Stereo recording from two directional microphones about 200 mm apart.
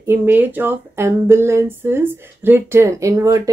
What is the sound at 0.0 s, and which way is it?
Speech, 10° right (ahead or behind).